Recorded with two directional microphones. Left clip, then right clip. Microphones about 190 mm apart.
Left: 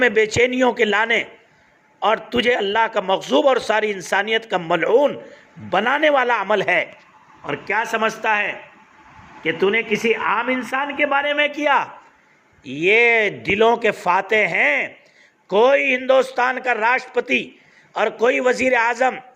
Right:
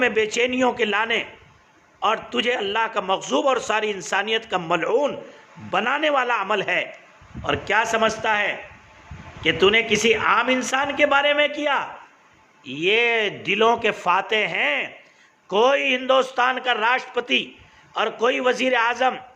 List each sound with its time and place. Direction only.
0.0 s a man's voice: 15° left (ahead or behind)
7.7 s a man's voice: 10° left (ahead or behind)
9.5 s speech: centre (ahead or behind)
11.3 s a man's voice: 20° left (ahead or behind)